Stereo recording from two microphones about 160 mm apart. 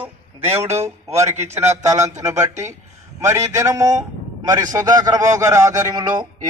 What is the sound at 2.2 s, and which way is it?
A man's voice, 20° right (ahead or behind).